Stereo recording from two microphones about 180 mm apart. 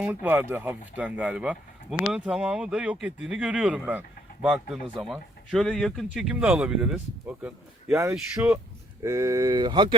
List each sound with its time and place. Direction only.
0.0 s speech: 10° right (ahead or behind)
9.0 s speech: 15° right (ahead or behind)